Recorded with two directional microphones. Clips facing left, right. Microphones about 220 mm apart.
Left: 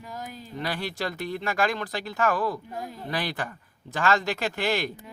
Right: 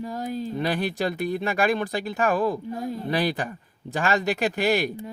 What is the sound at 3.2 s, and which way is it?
Speech, 15° right (ahead or behind).